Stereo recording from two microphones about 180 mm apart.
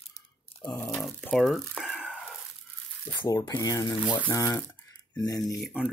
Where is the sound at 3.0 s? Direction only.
20° left (ahead or behind).